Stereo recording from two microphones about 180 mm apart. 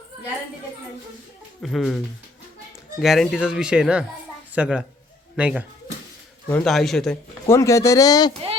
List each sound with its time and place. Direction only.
1.6 s speech: centre (ahead or behind)
3.0 s speech: centre (ahead or behind)
7.5 s speech: 15° left (ahead or behind)